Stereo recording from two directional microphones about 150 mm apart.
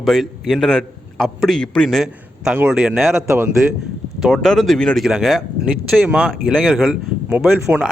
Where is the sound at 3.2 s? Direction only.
15° right (ahead or behind).